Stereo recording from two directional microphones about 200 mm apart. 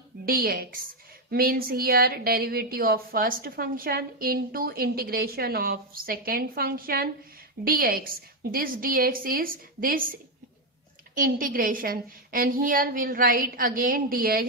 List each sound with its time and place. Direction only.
0.2 s a woman's voice: 50° right (ahead or behind)
11.1 s a woman's voice: 45° right (ahead or behind)